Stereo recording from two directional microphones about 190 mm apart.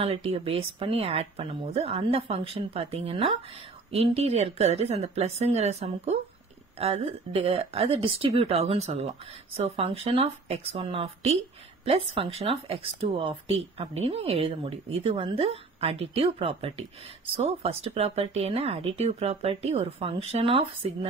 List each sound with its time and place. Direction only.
0.0 s speech: 30° right (ahead or behind)